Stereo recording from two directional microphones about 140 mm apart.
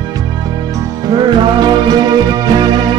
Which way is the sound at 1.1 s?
30° right (ahead or behind).